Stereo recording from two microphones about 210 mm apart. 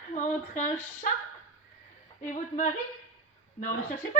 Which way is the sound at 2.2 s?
35° left (ahead or behind).